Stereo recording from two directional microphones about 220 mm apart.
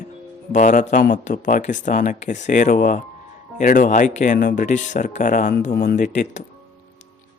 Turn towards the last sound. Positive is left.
turn(degrees=35)  # may be behind; listen again after turning